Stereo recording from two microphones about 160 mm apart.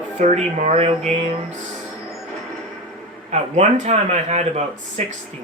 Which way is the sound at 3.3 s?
45° right (ahead or behind).